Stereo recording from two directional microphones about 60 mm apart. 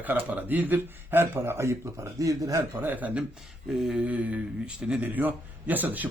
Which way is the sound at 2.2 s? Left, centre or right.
Right.